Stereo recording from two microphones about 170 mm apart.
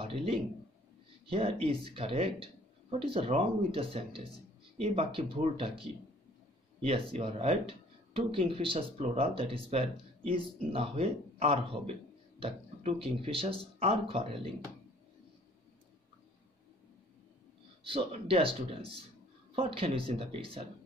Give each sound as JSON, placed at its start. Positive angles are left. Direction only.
{"t": 0.0, "sound": "speech", "side_deg": -35}
{"t": 17.8, "sound": "speech", "side_deg": -30}